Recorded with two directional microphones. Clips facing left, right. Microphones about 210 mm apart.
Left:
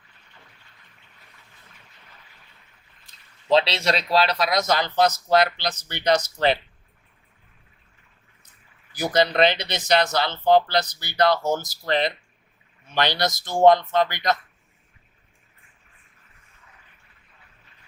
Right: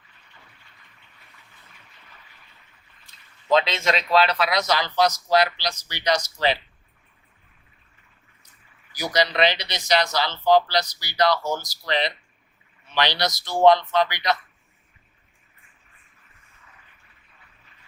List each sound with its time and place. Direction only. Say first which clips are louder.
3.5 s speech: left 1 dB; 35° left (ahead or behind); by 6.2 s 55° left (ahead or behind)
8.9 s speech: left 3 dB; 55° left (ahead or behind)